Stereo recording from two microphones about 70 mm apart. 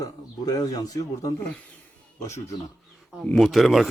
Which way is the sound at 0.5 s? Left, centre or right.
Left.